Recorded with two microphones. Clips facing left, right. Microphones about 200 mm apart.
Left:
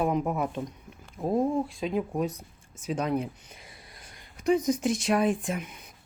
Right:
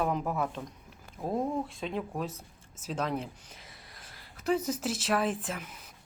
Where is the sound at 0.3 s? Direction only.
15° left (ahead or behind).